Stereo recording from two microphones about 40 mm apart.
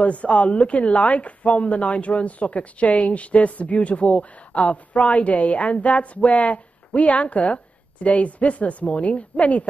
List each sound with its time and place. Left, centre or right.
0.0 s speech: left